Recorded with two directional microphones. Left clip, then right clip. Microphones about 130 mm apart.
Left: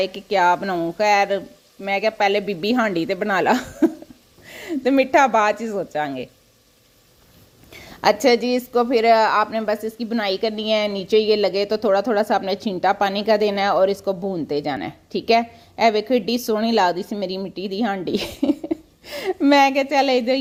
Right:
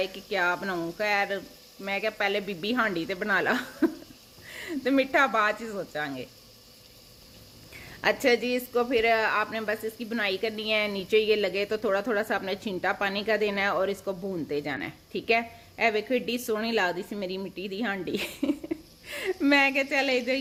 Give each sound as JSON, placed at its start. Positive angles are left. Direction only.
{"t": 0.0, "sound": "a woman's voice", "side_deg": 45}
{"t": 0.6, "sound": "a woman's voice", "side_deg": 35}
{"t": 0.9, "sound": "a woman's voice", "side_deg": 45}
{"t": 7.7, "sound": "a woman's voice", "side_deg": 50}